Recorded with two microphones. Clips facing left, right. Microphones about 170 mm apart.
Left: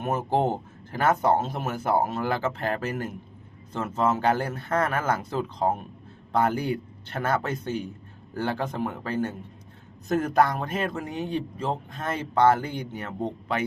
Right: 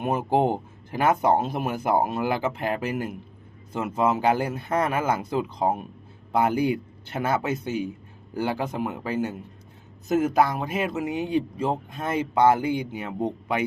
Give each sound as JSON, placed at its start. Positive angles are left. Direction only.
{"t": 0.0, "sound": "a man's voice", "side_deg": -15}